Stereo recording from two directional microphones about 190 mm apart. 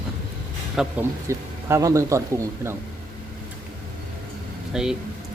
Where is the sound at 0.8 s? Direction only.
10° right (ahead or behind).